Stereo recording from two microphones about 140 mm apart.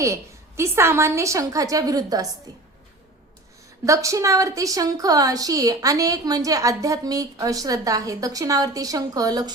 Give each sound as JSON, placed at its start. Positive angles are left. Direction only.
{"t": 0.0, "sound": "a woman's voice", "side_deg": -20}
{"t": 3.8, "sound": "a woman's voice", "side_deg": -20}